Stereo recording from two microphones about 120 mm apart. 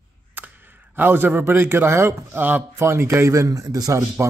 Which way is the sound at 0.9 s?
15° right (ahead or behind).